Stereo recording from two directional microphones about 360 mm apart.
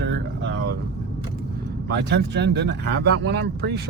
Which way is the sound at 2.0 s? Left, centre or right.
Right.